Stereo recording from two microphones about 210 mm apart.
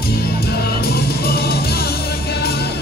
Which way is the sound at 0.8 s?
50° left (ahead or behind).